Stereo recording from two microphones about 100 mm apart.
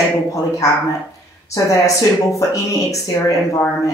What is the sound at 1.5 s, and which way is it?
Speech, 35° left (ahead or behind).